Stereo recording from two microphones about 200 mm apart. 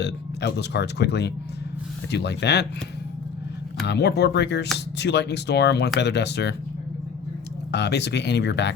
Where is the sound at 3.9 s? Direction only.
55° left (ahead or behind).